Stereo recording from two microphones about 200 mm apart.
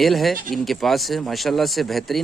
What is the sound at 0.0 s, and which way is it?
Speech, centre (ahead or behind).